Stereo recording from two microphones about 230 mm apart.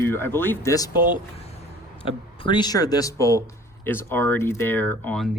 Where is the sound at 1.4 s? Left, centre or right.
Left.